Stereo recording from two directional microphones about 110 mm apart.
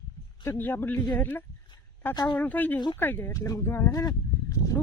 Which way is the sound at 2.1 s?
40° left (ahead or behind).